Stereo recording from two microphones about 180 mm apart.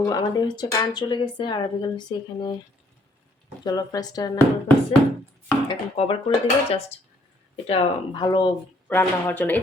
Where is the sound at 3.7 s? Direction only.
20° left (ahead or behind).